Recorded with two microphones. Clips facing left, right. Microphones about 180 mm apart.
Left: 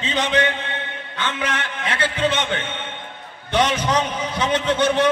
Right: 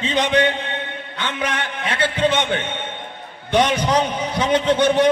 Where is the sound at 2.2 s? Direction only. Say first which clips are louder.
Right 3 dB; 15° right (ahead or behind).